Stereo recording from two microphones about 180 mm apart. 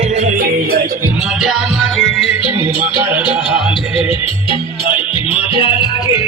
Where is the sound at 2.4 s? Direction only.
30° left (ahead or behind).